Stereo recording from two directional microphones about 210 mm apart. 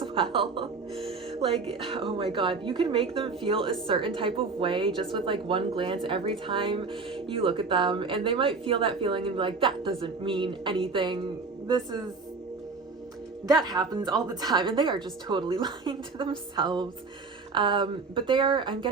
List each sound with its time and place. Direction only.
0.0 s speech: 25° right (ahead or behind)
13.5 s speech: 20° right (ahead or behind)